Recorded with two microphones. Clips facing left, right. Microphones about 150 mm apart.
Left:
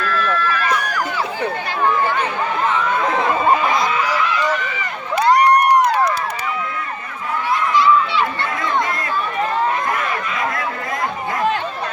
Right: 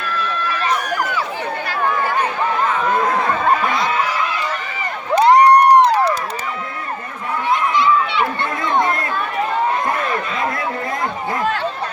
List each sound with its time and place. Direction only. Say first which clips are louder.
0.5 s run: even; 25° right (ahead or behind)
5.2 s crowd: right 3 dB; 25° right (ahead or behind)
7.7 s a sound: left 1 dB; 20° right (ahead or behind)